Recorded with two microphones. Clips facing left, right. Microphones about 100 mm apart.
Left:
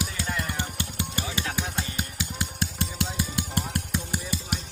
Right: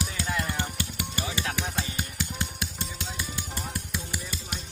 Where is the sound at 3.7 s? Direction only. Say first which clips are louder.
Left 4 dB; 60° left (ahead or behind).